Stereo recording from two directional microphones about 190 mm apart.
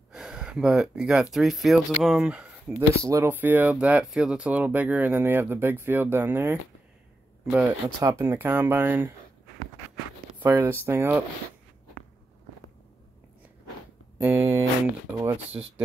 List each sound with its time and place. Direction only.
0.1 s a sound: 5° right (ahead or behind)
1.3 s speech: centre (ahead or behind)
3.0 s speech: 15° right (ahead or behind)
7.6 s speech: 15° right (ahead or behind)
10.4 s speech: 15° right (ahead or behind)
14.1 s a sound: 10° right (ahead or behind)
15.1 s speech: 10° right (ahead or behind)